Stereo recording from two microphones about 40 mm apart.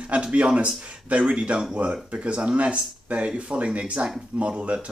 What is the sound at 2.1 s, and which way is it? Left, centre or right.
Speech, right.